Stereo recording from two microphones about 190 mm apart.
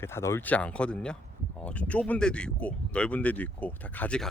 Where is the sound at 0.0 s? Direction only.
15° left (ahead or behind).